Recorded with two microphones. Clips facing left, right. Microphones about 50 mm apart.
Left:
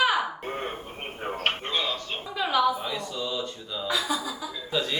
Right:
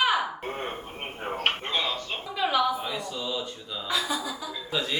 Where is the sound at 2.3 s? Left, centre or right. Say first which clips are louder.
Left 1 dB; centre.